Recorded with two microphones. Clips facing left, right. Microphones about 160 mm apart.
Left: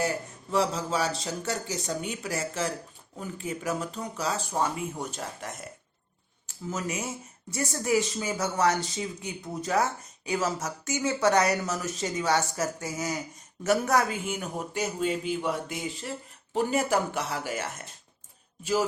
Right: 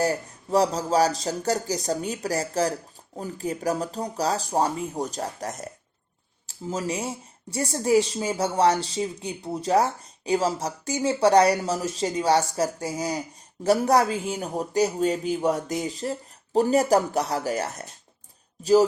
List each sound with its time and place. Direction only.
0.0 s speech: 40° right (ahead or behind)